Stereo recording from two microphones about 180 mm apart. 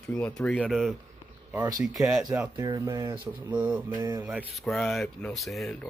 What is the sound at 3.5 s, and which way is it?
Mantra, 5° right (ahead or behind).